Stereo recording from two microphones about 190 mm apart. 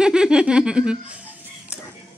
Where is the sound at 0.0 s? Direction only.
5° right (ahead or behind).